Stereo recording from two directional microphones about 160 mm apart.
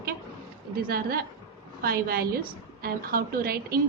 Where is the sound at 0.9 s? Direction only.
70° right (ahead or behind).